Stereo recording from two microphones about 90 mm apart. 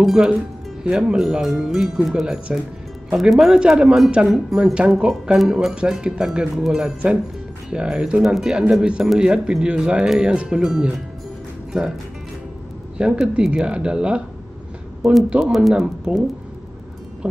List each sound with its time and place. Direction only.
0.0 s speech: 5° right (ahead or behind)
12.9 s speech: 10° right (ahead or behind)
15.2 s speech: 10° right (ahead or behind)